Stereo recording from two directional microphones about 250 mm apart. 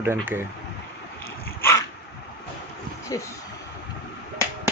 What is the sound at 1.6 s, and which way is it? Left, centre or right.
Dog, centre.